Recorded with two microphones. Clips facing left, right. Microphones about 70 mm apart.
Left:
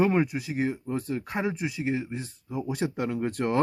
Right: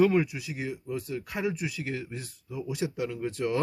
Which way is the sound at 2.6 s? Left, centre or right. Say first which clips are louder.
Left 2 dB; left.